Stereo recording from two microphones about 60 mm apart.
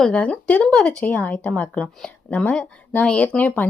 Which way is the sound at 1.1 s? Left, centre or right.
Left.